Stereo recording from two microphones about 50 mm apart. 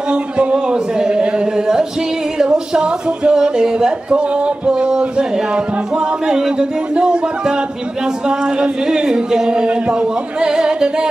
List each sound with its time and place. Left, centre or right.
0.1 s a sound: centre
2.3 s speech: centre
6.2 s speech: centre